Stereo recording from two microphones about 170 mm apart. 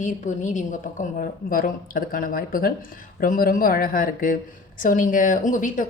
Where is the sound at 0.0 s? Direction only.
45° left (ahead or behind).